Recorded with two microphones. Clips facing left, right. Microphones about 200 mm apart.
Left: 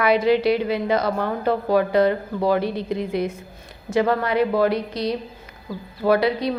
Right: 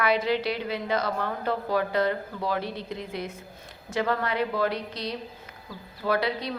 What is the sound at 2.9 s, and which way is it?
Speech, 70° left (ahead or behind).